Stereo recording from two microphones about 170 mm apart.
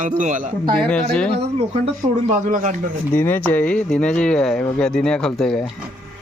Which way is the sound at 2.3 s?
50° right (ahead or behind).